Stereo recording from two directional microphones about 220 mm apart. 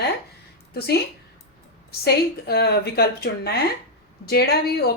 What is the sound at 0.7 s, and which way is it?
A woman's voice, 45° left (ahead or behind).